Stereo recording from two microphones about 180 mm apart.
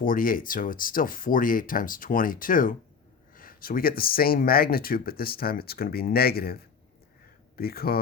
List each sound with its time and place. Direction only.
0.0 s speech: 50° left (ahead or behind)